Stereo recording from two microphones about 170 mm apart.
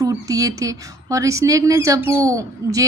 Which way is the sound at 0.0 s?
20° right (ahead or behind).